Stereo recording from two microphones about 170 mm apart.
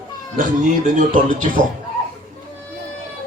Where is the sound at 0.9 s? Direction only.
50° right (ahead or behind).